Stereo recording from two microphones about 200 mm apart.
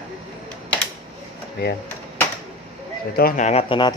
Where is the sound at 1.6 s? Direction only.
55° left (ahead or behind).